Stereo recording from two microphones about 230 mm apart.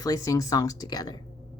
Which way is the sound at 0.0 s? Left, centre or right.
Centre.